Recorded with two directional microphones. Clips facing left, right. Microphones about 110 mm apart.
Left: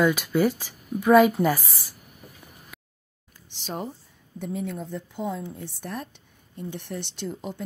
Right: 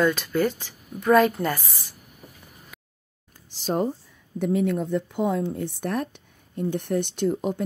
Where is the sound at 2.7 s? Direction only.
Centre (ahead or behind).